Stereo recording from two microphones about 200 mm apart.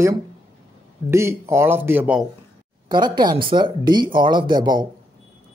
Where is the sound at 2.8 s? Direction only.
20° right (ahead or behind).